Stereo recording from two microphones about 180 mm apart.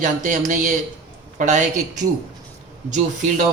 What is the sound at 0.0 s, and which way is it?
Speech, 45° right (ahead or behind).